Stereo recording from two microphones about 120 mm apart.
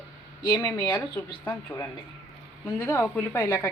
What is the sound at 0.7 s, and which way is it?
Speech, 40° left (ahead or behind).